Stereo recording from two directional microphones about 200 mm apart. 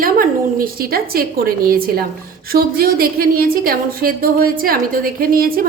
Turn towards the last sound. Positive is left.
turn(degrees=-45)  # may be behind; listen again after turning